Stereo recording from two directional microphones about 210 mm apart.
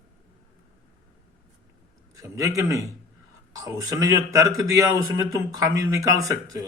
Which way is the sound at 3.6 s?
15° right (ahead or behind).